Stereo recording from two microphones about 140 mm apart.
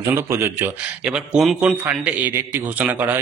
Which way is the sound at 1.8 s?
15° right (ahead or behind).